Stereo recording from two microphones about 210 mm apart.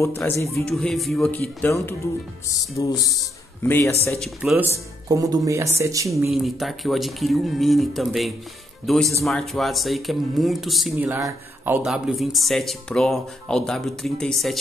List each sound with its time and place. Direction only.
0.0 s speech: 15° left (ahead or behind)
0.7 s speech: centre (ahead or behind)
4.2 s speech: 5° right (ahead or behind)
6.3 s speech: centre (ahead or behind)